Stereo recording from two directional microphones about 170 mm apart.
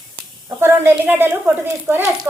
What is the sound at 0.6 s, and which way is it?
A woman's voice, 15° right (ahead or behind).